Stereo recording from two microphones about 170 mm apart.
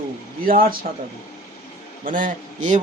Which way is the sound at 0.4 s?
55° right (ahead or behind).